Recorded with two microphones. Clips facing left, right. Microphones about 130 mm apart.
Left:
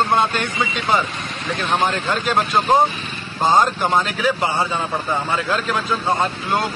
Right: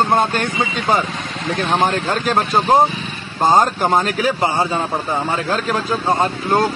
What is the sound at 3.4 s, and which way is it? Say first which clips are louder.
Speech: right 2 dB; 40° right (ahead or behind).